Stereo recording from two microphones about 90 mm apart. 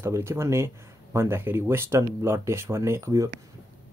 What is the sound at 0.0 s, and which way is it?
Speech, 30° right (ahead or behind).